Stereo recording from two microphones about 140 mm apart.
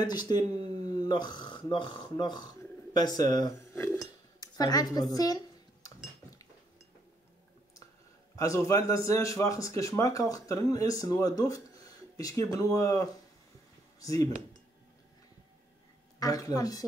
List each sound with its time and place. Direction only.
0.0 s speech: 30° left (ahead or behind)
3.8 s dishes: 25° left (ahead or behind)
8.4 s a man's voice: 20° left (ahead or behind)
16.2 s a man's voice: 25° left (ahead or behind)